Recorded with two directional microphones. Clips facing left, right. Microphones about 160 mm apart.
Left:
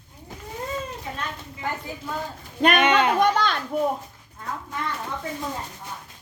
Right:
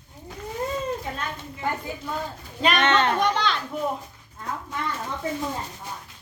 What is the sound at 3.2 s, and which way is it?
Children playing, 50° left (ahead or behind).